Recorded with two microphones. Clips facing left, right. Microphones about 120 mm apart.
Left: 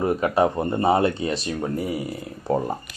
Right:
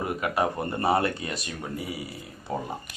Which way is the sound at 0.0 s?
30° left (ahead or behind).